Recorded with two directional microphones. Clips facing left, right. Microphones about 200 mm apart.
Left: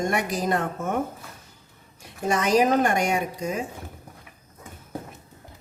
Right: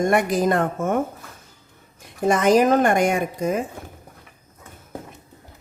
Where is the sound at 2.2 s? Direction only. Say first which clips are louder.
Right 4 dB; 50° right (ahead or behind).